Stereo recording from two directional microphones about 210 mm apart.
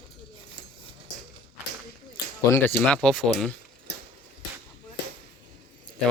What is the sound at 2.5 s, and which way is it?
Speech, 10° left (ahead or behind).